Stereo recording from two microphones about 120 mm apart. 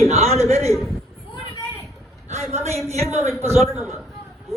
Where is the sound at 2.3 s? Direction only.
65° right (ahead or behind).